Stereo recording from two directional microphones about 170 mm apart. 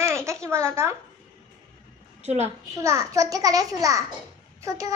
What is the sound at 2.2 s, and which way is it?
Speech, 40° right (ahead or behind).